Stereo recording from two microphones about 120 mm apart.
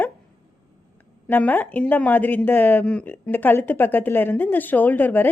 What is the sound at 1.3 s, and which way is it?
Speech, 15° left (ahead or behind).